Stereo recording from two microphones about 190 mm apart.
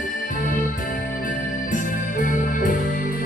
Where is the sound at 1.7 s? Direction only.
45° left (ahead or behind).